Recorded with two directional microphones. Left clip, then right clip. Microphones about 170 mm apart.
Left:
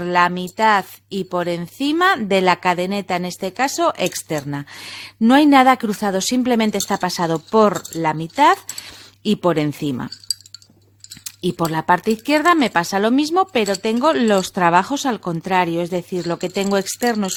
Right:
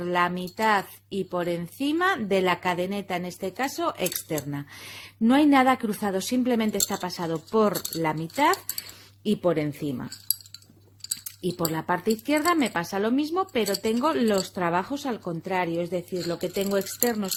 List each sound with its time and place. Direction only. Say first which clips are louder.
0.0 s speech: left 8 dB; 35° left (ahead or behind)
7.8 s speech: left 7 dB; 30° left (ahead or behind); by 10.3 s 45° left (ahead or behind)
11.5 s speech: left 10 dB; 40° left (ahead or behind)